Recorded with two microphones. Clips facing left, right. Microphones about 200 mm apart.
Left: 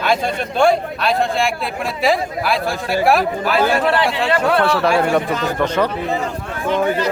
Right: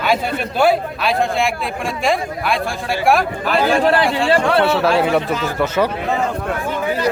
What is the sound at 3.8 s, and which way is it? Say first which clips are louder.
Speech: right 2 dB; 35° right (ahead or behind).